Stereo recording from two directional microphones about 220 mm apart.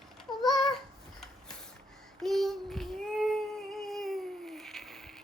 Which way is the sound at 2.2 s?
Centre (ahead or behind).